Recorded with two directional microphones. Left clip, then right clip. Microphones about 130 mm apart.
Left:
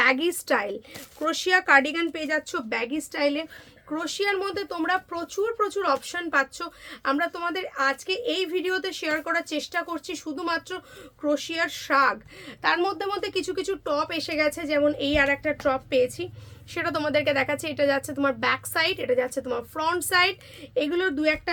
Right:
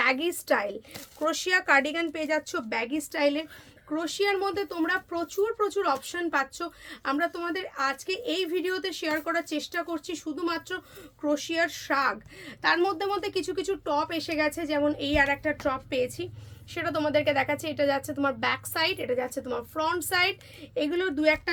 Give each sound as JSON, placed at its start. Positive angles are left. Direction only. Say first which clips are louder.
{"t": 0.0, "sound": "speech", "louder": "left 4 dB", "side_deg": 50}
{"t": 3.8, "sound": "speech", "louder": "left 1 dB", "side_deg": 35}
{"t": 12.6, "sound": "speech", "louder": "left 1 dB", "side_deg": 25}
{"t": 16.7, "sound": "speech", "louder": "left 1 dB", "side_deg": 60}
{"t": 20.7, "sound": "speech", "louder": "left 3 dB", "side_deg": 30}